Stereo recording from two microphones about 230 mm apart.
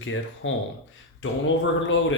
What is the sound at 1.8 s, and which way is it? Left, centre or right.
Speech, left.